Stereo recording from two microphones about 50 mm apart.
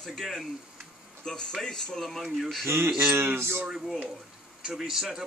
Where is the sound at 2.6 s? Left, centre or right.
Right.